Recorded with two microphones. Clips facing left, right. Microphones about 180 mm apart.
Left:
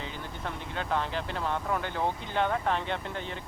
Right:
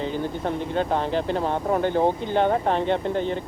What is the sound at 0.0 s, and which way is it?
Speech, 40° right (ahead or behind).